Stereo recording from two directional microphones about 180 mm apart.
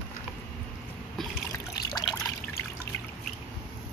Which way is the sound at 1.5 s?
20° left (ahead or behind).